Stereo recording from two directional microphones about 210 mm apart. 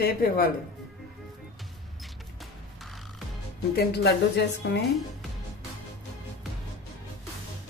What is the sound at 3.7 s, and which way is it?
A woman's voice, 50° left (ahead or behind).